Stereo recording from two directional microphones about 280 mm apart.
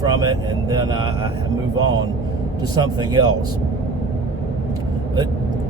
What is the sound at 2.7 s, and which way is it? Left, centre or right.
Speech, centre.